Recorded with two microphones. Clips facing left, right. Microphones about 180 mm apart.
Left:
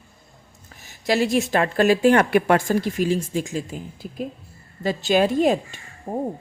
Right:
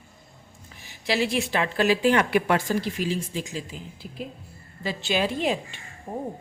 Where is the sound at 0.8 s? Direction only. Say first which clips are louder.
Left 4 dB; 45° left (ahead or behind).